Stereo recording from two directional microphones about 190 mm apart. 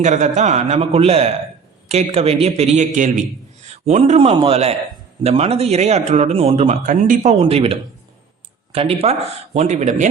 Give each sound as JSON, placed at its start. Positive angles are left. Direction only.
{"t": 0.0, "sound": "a man's voice", "side_deg": -40}
{"t": 6.8, "sound": "speech", "side_deg": -45}